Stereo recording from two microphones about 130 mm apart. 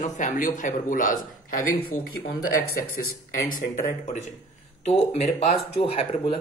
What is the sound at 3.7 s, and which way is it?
Speech, 70° left (ahead or behind).